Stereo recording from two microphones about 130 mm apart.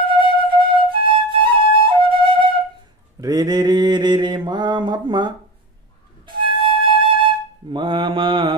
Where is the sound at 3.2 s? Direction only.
30° right (ahead or behind).